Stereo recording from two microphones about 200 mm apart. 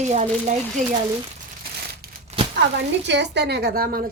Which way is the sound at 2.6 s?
60° right (ahead or behind).